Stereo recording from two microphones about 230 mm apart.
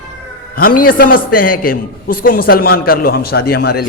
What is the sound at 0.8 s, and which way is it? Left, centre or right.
A man's voice, left.